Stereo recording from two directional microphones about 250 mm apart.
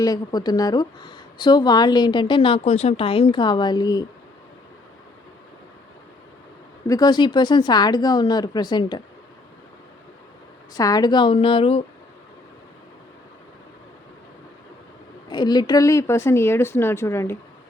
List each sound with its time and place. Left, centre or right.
0.0 s speech: centre
6.8 s speech: centre
10.8 s a woman's voice: centre
15.3 s speech: centre